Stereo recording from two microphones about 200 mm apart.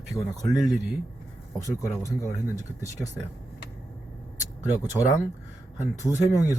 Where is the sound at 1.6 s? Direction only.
15° left (ahead or behind).